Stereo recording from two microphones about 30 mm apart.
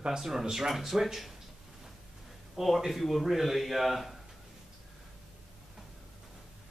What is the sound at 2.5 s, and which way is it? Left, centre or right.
A man's voice, centre.